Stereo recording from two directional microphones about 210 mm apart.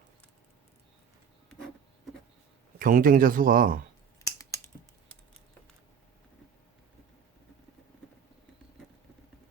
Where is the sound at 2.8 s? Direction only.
40° right (ahead or behind).